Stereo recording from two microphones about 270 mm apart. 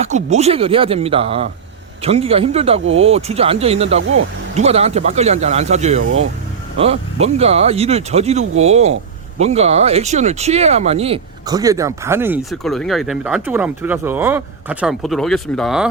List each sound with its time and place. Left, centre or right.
0.0 s speech: right
4.0 s speech: right
4.5 s speech: right; by 15.9 s centre